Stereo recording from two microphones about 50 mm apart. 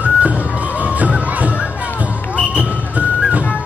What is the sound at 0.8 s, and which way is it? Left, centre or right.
Music, right.